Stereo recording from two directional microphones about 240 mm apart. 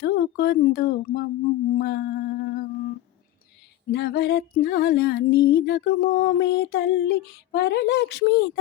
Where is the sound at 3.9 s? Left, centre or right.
Left.